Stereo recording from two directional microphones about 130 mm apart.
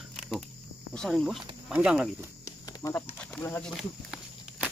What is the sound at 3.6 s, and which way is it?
Speech, centre (ahead or behind).